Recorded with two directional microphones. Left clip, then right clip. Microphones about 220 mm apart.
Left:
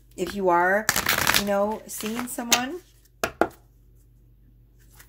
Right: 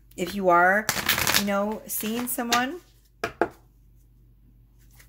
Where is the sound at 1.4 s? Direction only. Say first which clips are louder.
Left 3 dB; 25° right (ahead or behind).